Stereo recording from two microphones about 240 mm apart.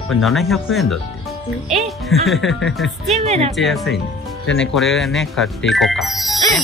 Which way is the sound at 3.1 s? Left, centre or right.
Right.